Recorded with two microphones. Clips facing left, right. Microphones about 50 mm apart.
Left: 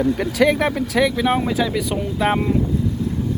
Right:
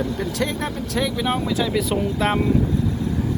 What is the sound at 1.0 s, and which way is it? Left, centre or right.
Speech, centre.